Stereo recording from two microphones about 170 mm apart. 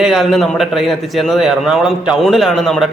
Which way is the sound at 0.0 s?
Centre (ahead or behind).